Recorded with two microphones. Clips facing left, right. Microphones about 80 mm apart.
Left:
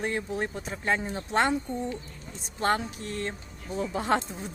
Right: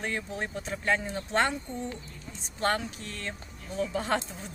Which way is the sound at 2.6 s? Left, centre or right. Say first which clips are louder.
Left 2 dB; left.